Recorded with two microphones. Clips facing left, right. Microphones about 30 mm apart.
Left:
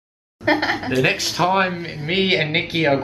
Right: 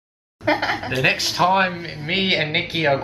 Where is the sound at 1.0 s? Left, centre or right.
Centre.